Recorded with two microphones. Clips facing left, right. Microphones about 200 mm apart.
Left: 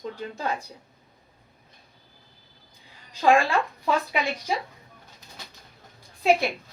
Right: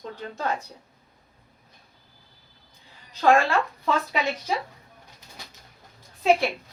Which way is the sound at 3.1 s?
10° left (ahead or behind).